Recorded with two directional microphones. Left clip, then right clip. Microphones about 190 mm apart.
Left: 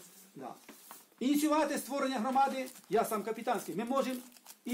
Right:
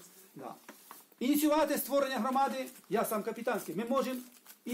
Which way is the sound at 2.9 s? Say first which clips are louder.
Left 1 dB; 20° right (ahead or behind).